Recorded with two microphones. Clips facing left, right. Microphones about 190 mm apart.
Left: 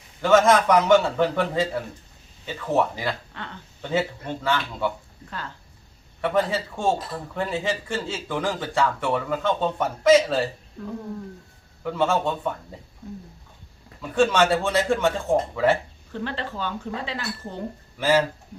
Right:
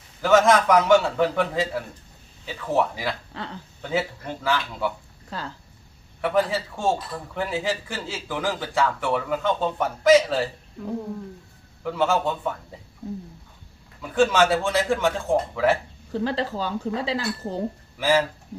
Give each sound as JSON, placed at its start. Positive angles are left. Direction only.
{"t": 0.2, "sound": "speech", "side_deg": 0}
{"t": 3.3, "sound": "speech", "side_deg": -35}
{"t": 3.8, "sound": "speech", "side_deg": -5}
{"t": 6.2, "sound": "speech", "side_deg": 0}
{"t": 11.8, "sound": "speech", "side_deg": 0}
{"t": 14.0, "sound": "speech", "side_deg": 0}
{"t": 16.1, "sound": "speech", "side_deg": -35}
{"t": 17.9, "sound": "speech", "side_deg": 0}